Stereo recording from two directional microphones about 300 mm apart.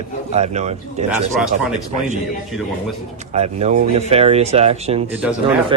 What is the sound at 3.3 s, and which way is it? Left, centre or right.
A man's voice, right.